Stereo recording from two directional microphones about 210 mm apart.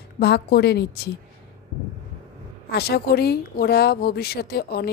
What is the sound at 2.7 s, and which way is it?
A woman's voice, 50° left (ahead or behind).